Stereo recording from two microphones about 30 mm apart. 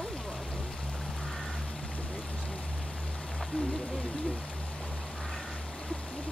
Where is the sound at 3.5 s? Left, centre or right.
Left.